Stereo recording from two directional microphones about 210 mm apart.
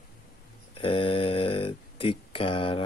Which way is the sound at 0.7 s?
25° left (ahead or behind).